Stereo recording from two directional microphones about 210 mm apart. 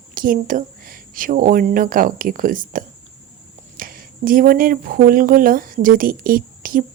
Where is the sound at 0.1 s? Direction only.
40° right (ahead or behind).